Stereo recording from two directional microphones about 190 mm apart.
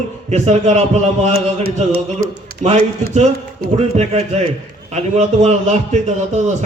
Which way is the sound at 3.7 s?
35° right (ahead or behind).